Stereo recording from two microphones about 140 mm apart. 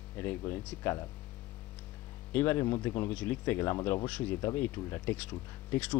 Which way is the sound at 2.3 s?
15° left (ahead or behind).